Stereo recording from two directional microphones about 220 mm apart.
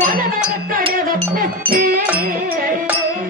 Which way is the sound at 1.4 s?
40° right (ahead or behind).